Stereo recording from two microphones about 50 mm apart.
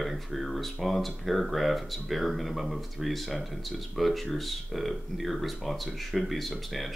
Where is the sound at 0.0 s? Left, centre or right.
Centre.